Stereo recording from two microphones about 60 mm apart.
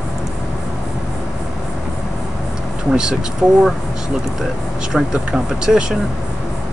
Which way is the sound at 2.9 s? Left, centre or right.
Centre.